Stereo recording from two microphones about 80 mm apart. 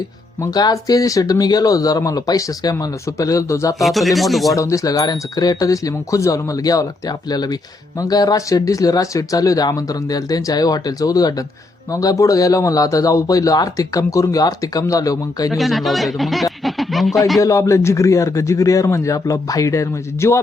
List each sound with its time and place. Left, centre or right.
0.5 s speech: left
3.8 s speech: centre
4.5 s speech: left
15.4 s speech: centre
17.4 s a man's voice: left